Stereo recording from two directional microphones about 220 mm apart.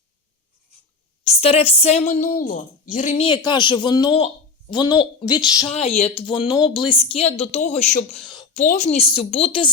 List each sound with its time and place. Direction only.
1.2 s speech: 30° left (ahead or behind)
8.3 s a sound: 20° left (ahead or behind)
8.6 s speech: 35° left (ahead or behind)